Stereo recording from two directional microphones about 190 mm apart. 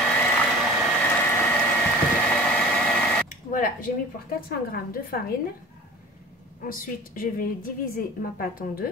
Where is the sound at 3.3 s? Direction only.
45° left (ahead or behind).